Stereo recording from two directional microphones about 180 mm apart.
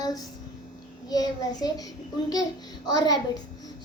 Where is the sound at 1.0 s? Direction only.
20° left (ahead or behind).